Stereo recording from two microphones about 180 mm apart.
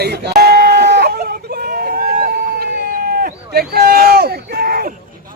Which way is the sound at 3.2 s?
55° right (ahead or behind).